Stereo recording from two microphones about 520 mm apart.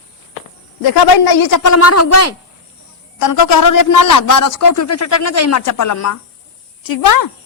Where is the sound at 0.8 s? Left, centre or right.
Left.